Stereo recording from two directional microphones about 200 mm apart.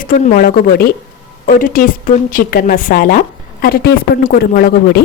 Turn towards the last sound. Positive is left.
turn(degrees=50)  # may be behind; listen again after turning